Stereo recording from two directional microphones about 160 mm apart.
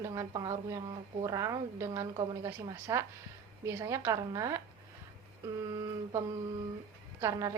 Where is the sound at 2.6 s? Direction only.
20° right (ahead or behind).